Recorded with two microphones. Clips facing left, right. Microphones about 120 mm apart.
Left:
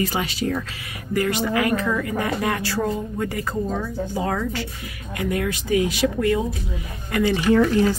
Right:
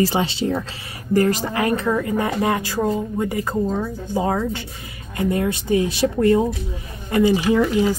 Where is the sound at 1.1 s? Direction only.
40° right (ahead or behind).